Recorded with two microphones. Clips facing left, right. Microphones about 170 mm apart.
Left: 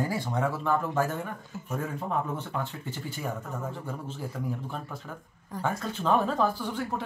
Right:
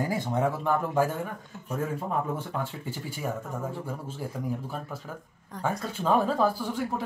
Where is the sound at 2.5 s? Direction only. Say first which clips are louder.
Left 1 dB; centre (ahead or behind).